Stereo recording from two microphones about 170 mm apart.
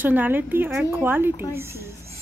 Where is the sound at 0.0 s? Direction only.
10° right (ahead or behind).